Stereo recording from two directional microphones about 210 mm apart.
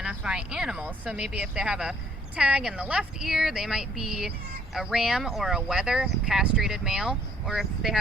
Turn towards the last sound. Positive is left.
turn(degrees=0)  # may be behind; listen again after turning